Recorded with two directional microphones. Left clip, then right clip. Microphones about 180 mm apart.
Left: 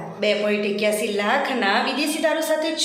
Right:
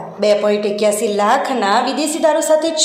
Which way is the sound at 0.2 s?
30° right (ahead or behind).